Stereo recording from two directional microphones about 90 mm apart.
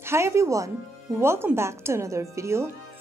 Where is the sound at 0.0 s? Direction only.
30° right (ahead or behind).